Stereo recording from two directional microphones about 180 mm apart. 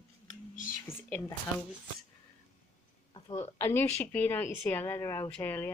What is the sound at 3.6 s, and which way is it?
Speech, 10° left (ahead or behind).